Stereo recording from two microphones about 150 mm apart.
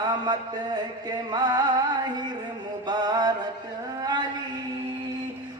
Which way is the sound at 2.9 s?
25° right (ahead or behind).